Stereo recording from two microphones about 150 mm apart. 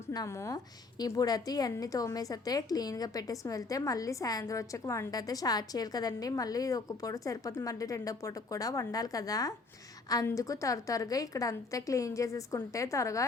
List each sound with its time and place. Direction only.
0.1 s a woman's voice: 20° left (ahead or behind)